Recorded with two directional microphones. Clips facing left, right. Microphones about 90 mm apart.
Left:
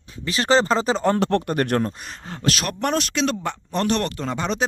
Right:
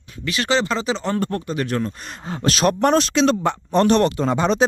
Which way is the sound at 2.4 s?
30° right (ahead or behind).